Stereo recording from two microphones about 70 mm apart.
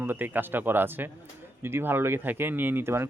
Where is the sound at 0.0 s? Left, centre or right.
Right.